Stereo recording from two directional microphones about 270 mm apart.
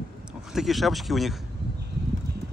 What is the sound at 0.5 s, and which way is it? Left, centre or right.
Speech, centre.